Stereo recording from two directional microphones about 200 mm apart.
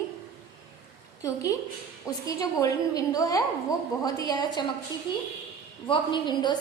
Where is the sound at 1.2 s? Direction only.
15° left (ahead or behind).